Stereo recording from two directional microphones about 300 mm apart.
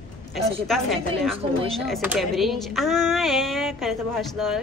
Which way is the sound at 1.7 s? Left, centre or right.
Centre.